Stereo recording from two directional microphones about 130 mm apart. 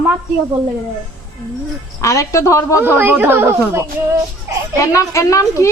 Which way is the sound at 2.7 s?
15° right (ahead or behind).